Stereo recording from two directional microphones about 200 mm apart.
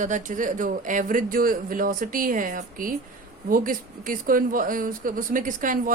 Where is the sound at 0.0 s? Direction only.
40° right (ahead or behind).